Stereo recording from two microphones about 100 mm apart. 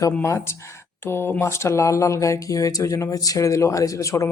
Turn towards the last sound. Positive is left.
turn(degrees=30)  # may be behind; listen again after turning